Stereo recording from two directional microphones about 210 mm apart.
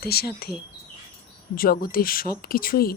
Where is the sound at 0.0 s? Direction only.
50° left (ahead or behind).